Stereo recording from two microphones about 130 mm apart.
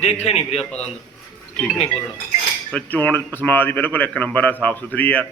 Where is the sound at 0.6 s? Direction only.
5° left (ahead or behind).